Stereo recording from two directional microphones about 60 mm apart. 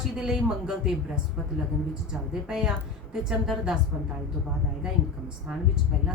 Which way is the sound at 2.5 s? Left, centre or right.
Centre.